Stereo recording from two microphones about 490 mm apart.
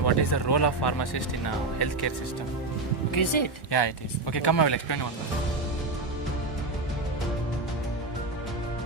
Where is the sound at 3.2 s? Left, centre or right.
Left.